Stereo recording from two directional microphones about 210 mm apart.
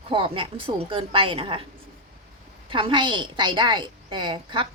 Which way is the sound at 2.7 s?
25° right (ahead or behind).